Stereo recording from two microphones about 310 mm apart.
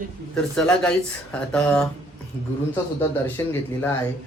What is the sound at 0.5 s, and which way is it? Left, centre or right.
Speech, centre.